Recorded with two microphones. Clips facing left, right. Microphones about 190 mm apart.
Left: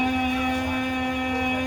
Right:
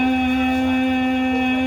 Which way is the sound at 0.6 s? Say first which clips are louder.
Right 8 dB; 60° right (ahead or behind).